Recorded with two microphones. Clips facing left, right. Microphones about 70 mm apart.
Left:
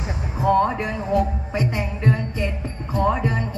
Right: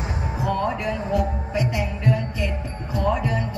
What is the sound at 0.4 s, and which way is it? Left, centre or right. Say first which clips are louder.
Music: left 6 dB; left.